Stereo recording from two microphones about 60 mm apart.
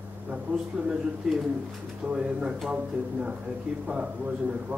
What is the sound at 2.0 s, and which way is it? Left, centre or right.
Speech, centre.